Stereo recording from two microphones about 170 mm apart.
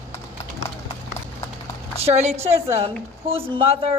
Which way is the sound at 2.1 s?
40° right (ahead or behind).